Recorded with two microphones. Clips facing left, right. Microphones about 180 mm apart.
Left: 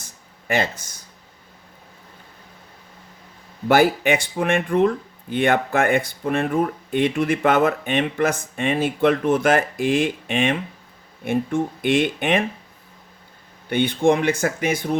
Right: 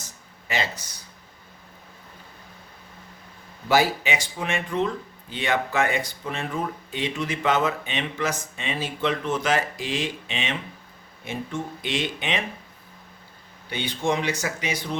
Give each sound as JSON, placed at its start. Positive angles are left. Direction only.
{"t": 0.4, "sound": "speech", "side_deg": 55}
{"t": 3.7, "sound": "speech", "side_deg": 55}
{"t": 13.7, "sound": "speech", "side_deg": 55}